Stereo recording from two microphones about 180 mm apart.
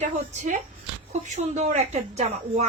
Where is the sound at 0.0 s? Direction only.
45° right (ahead or behind).